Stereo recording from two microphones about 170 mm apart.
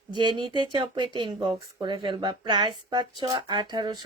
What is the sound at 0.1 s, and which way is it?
A woman's voice, 25° right (ahead or behind).